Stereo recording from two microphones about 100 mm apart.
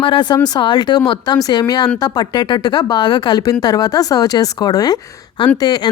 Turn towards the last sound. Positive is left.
turn(degrees=45)  # may be behind; listen again after turning